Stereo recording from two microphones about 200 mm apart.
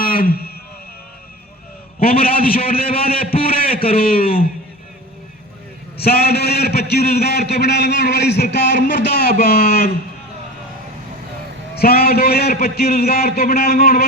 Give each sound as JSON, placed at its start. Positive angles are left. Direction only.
{"t": 0.0, "sound": "a sound", "side_deg": 45}
{"t": 2.0, "sound": "a man's voice", "side_deg": 50}
{"t": 2.6, "sound": "a sound", "side_deg": 50}
{"t": 3.9, "sound": "a man's voice", "side_deg": 45}
{"t": 6.0, "sound": "a man's voice", "side_deg": 50}
{"t": 11.7, "sound": "a man's voice", "side_deg": 50}